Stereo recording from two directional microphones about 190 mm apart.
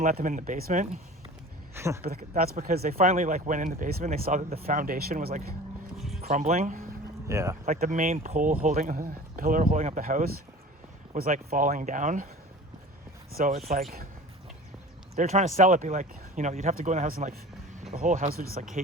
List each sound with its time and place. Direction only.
0.0 s speech: 45° right (ahead or behind)
1.7 s speech: 15° right (ahead or behind)
2.0 s speech: 55° right (ahead or behind)
3.1 s speech: 40° right (ahead or behind)
6.2 s speech: 40° right (ahead or behind)
7.3 s speech: 15° right (ahead or behind)
7.6 s speech: 35° right (ahead or behind)
13.3 s speech: 45° right (ahead or behind)
15.1 s speech: 40° right (ahead or behind)